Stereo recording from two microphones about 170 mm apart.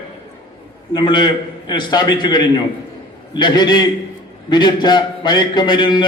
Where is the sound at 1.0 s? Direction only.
25° left (ahead or behind).